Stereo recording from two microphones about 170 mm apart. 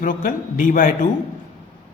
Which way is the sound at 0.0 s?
50° left (ahead or behind).